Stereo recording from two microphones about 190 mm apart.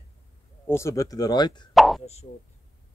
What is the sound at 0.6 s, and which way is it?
Speech, 15° left (ahead or behind).